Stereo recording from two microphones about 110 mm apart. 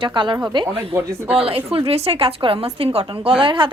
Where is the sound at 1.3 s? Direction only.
60° right (ahead or behind).